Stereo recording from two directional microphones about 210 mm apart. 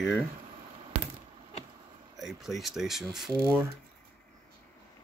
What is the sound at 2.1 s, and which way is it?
Speech, centre (ahead or behind).